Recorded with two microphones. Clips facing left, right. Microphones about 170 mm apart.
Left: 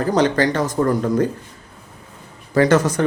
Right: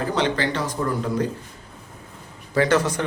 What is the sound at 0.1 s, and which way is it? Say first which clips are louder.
Speech: left 8 dB; 40° left (ahead or behind).